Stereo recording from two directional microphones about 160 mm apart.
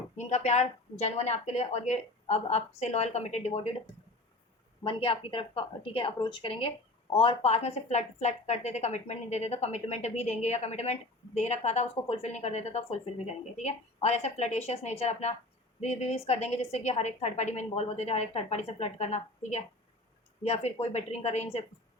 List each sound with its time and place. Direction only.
0.2 s a woman's voice: 45° left (ahead or behind)
4.8 s a woman's voice: 35° left (ahead or behind)